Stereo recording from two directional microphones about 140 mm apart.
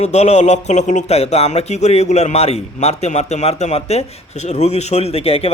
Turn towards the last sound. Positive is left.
turn(degrees=45)  # may be behind; listen again after turning